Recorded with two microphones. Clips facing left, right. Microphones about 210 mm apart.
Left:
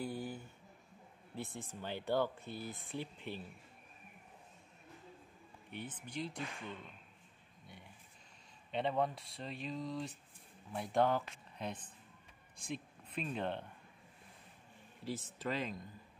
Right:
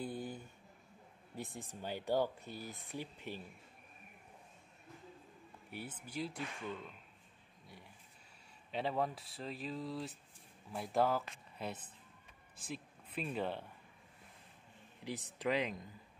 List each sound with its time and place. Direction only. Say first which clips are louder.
0.0 s a sound: left 1 dB; 20° right (ahead or behind)
1.3 s speech: left 1 dB; 15° right (ahead or behind)
2.4 s speech: left 2 dB; 40° right (ahead or behind)
5.7 s speech: left 1 dB; 10° right (ahead or behind)
8.7 s speech: left 2 dB; 5° right (ahead or behind)
15.0 s speech: right 2 dB; 15° right (ahead or behind)